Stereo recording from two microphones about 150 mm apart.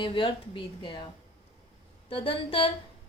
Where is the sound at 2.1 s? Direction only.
35° left (ahead or behind).